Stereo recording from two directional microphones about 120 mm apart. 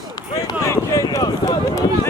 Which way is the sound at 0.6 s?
30° left (ahead or behind).